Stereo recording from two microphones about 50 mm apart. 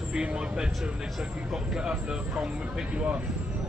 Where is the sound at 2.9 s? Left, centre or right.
Right.